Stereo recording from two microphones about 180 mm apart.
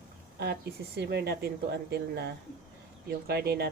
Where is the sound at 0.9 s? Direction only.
60° right (ahead or behind).